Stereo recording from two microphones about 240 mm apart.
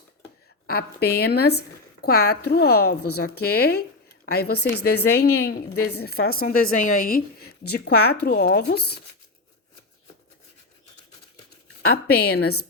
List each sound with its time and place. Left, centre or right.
0.7 s speech: left
11.8 s speech: left